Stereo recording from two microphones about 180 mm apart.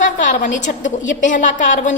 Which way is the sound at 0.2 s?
45° left (ahead or behind).